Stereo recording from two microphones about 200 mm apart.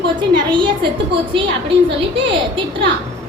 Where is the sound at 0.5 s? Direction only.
25° right (ahead or behind).